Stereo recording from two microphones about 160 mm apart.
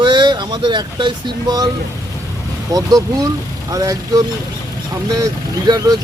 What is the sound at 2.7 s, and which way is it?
Speech, 20° right (ahead or behind).